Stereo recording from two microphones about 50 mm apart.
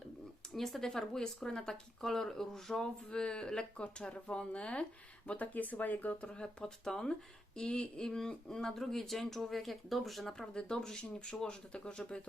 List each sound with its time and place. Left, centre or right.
0.5 s speech: centre
3.1 s speech: centre; by 6.1 s left
6.2 s speech: left